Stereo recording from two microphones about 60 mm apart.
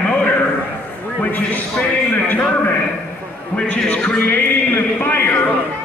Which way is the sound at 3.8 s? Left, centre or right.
Left.